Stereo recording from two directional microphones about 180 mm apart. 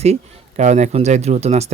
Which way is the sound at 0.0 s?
40° right (ahead or behind).